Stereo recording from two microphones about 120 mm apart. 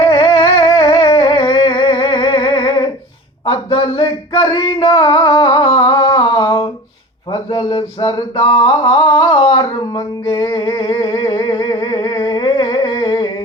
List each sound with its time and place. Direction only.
0.1 s a sound: 40° left (ahead or behind)
7.3 s mantra: 45° left (ahead or behind)
10.4 s humming: 35° left (ahead or behind)